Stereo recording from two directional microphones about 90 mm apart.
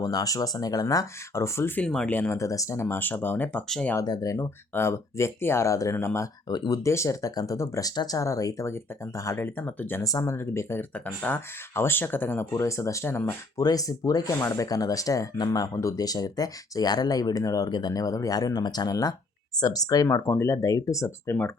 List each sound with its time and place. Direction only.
0.0 s speech: 45° left (ahead or behind)
1.3 s speech: 30° left (ahead or behind)
2.0 s speech: 20° left (ahead or behind)
2.3 s speech: 35° left (ahead or behind)
2.8 s speech: 20° left (ahead or behind)
4.0 s speech: 50° left (ahead or behind)
4.3 s speech: 30° left (ahead or behind)
10.0 s speech: 40° left (ahead or behind)
10.3 s speech: 30° left (ahead or behind)
13.6 s speech: 45° left (ahead or behind)
20.2 s speech: 20° left (ahead or behind)
20.5 s speech: 35° left (ahead or behind)